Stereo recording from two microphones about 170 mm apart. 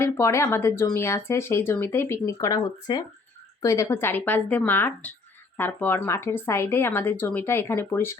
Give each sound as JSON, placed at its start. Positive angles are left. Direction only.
{"t": 0.0, "sound": "speech", "side_deg": 15}